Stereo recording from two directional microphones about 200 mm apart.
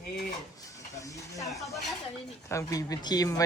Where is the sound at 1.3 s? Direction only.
15° left (ahead or behind).